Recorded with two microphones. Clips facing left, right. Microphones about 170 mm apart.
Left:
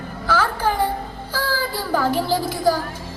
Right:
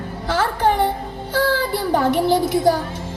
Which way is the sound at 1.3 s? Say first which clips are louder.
Right 6 dB; 25° right (ahead or behind).